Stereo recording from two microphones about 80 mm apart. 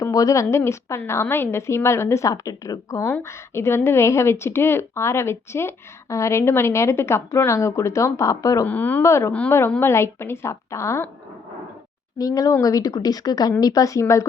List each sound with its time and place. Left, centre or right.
0.0 s a woman's voice: left
2.3 s speech: left
3.0 s a woman's voice: left
8.6 s speech: left
9.0 s a woman's voice: left
12.1 s speech: left